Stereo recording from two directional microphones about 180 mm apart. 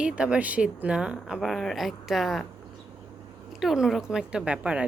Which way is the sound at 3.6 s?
Centre (ahead or behind).